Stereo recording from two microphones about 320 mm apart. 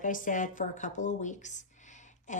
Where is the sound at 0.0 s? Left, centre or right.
Left.